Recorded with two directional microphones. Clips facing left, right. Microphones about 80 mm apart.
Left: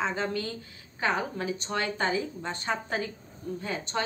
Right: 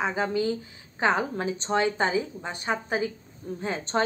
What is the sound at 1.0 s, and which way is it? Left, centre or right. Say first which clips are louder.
A woman's voice: right 4 dB; right.